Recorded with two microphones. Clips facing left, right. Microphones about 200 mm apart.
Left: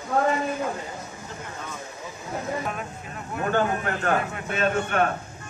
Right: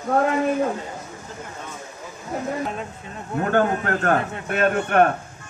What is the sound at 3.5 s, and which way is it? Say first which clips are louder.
A man's voice: right 4 dB; 55° right (ahead or behind).